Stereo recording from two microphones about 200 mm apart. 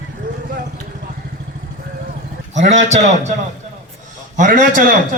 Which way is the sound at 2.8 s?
35° right (ahead or behind).